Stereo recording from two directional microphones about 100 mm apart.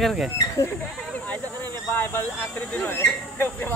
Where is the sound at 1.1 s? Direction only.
15° left (ahead or behind).